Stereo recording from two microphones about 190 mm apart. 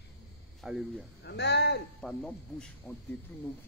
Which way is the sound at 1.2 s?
65° left (ahead or behind).